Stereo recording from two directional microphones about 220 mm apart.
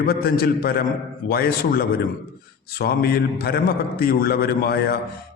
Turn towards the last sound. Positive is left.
turn(degrees=45)  # may be behind; listen again after turning